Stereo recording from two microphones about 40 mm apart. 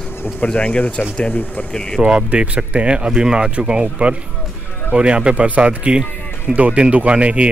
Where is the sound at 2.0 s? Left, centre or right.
Right.